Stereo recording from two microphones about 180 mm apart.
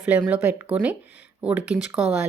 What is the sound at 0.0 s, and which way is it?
A woman's voice, 10° right (ahead or behind).